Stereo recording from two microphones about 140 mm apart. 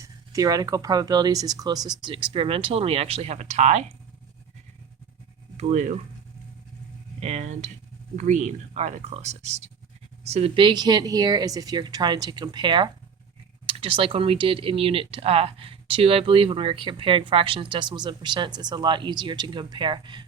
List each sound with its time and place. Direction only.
0.0 s speech: 25° right (ahead or behind); by 3.8 s 50° right (ahead or behind)
5.5 s speech: 55° right (ahead or behind)
7.2 s speech: 50° right (ahead or behind); by 20.2 s 35° right (ahead or behind)